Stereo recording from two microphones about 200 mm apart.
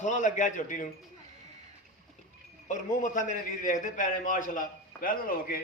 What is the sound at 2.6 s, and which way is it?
A man's voice, 40° left (ahead or behind).